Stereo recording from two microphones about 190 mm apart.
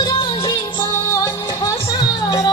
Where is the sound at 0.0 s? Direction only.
25° left (ahead or behind).